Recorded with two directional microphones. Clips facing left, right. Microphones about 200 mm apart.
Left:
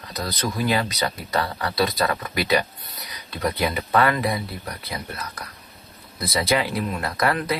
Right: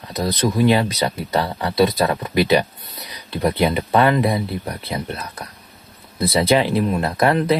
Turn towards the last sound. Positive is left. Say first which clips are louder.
# right 6 dB
turn(degrees=-25)  # may be behind; listen again after turning